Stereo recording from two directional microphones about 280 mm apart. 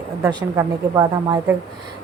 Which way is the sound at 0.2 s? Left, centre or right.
Centre.